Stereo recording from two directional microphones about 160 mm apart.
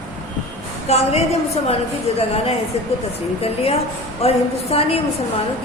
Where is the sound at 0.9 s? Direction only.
40° left (ahead or behind).